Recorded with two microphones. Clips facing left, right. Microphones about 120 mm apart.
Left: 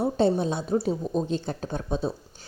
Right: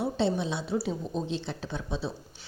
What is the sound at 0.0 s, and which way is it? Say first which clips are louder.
A woman's voice: left 5 dB; 45° left (ahead or behind).